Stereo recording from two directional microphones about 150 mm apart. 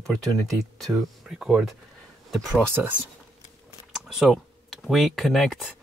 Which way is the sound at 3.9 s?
Centre (ahead or behind).